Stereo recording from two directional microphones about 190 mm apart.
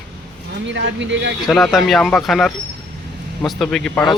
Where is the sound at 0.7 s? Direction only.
75° right (ahead or behind).